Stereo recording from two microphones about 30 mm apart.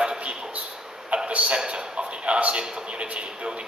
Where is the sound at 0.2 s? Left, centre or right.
Right.